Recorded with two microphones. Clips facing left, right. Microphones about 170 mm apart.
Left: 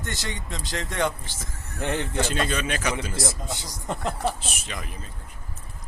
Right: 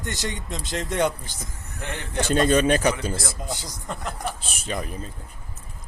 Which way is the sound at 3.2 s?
25° left (ahead or behind).